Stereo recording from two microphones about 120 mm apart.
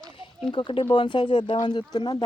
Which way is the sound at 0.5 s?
45° left (ahead or behind).